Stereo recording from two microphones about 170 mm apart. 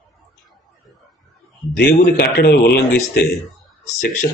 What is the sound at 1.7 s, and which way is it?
Speech, 70° left (ahead or behind).